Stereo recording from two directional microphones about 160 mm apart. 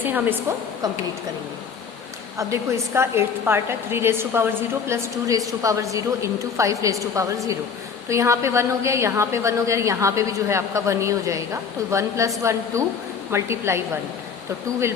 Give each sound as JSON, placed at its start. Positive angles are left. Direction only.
{"t": 0.0, "sound": "a woman's voice", "side_deg": -10}
{"t": 2.4, "sound": "a woman's voice", "side_deg": -20}